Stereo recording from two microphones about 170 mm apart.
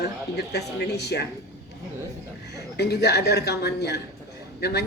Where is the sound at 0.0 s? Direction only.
80° left.